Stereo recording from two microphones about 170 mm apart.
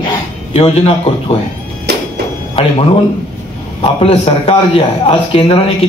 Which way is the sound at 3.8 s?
35° left (ahead or behind).